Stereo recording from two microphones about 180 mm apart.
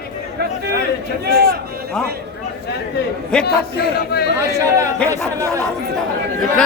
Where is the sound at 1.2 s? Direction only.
55° right (ahead or behind).